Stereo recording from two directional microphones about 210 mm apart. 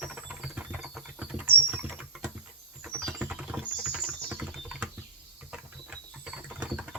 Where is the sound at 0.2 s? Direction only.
5° right (ahead or behind).